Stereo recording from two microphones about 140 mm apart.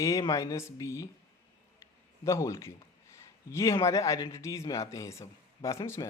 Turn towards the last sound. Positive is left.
turn(degrees=20)  # may be behind; listen again after turning